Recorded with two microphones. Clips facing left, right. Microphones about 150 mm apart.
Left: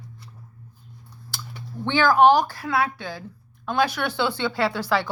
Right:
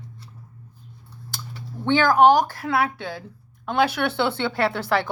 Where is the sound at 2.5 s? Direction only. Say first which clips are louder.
Right 1 dB; 55° right (ahead or behind).